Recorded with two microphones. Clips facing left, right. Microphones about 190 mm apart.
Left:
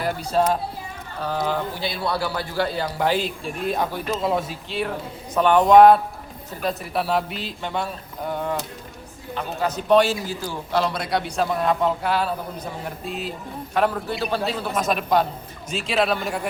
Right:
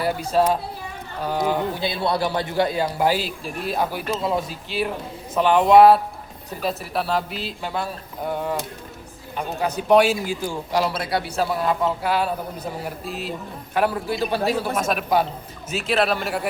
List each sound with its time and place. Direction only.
1.2 s a man's voice: 15° right (ahead or behind)